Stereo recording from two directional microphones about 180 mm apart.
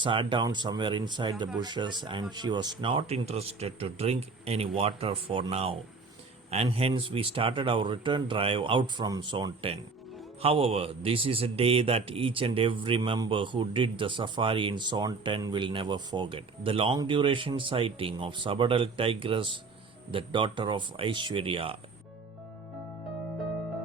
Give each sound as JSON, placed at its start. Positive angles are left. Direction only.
{"t": 0.0, "sound": "a man's voice", "side_deg": -25}